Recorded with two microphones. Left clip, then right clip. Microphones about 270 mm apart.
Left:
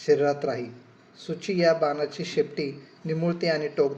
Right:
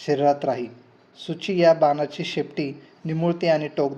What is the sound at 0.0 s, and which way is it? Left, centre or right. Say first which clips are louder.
A man's voice: right 2 dB; right.